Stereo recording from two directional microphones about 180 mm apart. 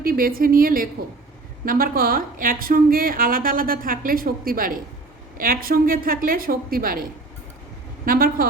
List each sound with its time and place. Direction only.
0.0 s a woman's voice: 55° right (ahead or behind)
8.0 s a woman's voice: 55° right (ahead or behind)